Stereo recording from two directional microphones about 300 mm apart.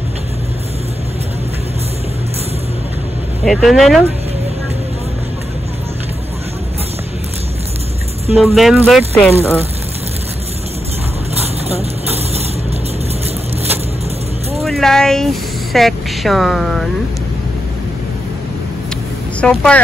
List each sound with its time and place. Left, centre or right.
3.4 s speech: centre
8.4 s speech: centre
11.3 s a sound: centre
14.6 s speech: centre
19.4 s speech: centre